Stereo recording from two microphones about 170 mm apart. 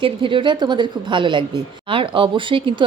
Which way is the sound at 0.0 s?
30° right (ahead or behind).